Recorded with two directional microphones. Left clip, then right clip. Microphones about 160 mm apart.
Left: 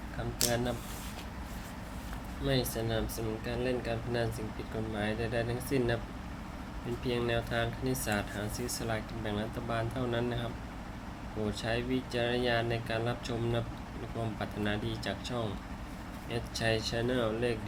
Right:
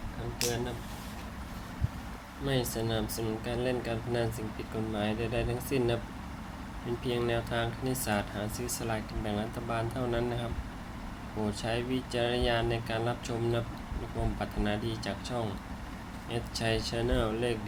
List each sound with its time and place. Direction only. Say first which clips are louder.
2.5 s speech: right 1 dB; 5° right (ahead or behind)
7.1 s speech: right 1 dB; centre (ahead or behind)
11.6 s speech: even; 5° right (ahead or behind)